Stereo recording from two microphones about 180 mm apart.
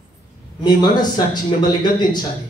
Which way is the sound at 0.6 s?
25° left (ahead or behind).